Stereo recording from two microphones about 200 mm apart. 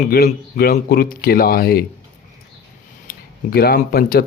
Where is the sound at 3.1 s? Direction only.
45° left (ahead or behind).